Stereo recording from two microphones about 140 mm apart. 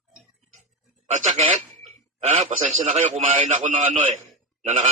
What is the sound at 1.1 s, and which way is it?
A man's voice, 60° right (ahead or behind).